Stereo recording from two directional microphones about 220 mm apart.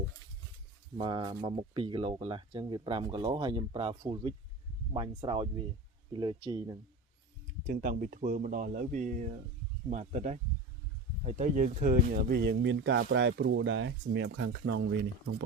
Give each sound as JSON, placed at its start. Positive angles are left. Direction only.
{"t": 0.9, "sound": "speech", "side_deg": -25}
{"t": 7.7, "sound": "speech", "side_deg": -40}